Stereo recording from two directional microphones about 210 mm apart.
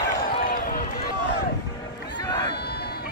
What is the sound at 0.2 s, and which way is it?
Run, 40° left (ahead or behind).